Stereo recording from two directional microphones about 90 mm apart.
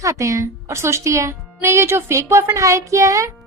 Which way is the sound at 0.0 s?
35° right (ahead or behind).